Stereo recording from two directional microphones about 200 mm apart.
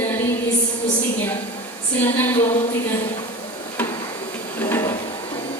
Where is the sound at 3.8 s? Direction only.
5° left (ahead or behind).